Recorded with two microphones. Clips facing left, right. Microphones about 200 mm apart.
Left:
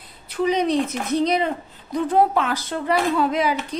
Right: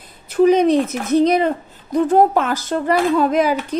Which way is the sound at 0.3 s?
50° right (ahead or behind).